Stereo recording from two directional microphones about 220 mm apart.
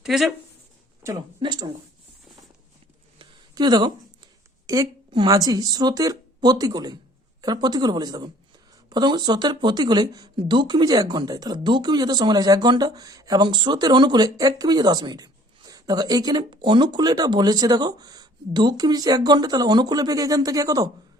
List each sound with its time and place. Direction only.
0.0 s speech: centre (ahead or behind)
1.0 s speech: 20° right (ahead or behind)
3.2 s a sound: 20° right (ahead or behind)
4.6 s speech: 15° right (ahead or behind)